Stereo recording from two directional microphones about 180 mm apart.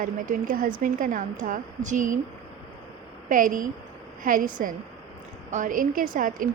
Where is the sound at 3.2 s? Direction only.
50° right (ahead or behind).